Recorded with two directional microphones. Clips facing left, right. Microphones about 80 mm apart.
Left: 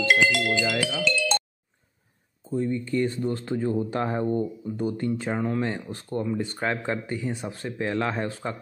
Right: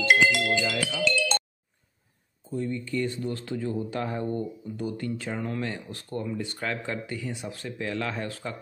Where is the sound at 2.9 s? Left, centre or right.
Left.